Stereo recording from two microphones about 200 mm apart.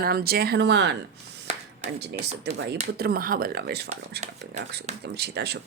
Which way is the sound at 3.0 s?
50° right (ahead or behind).